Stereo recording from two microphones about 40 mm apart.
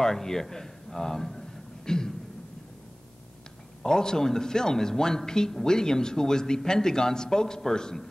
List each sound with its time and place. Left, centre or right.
0.0 s a man's voice: centre
1.9 s speech: centre
3.8 s speech: centre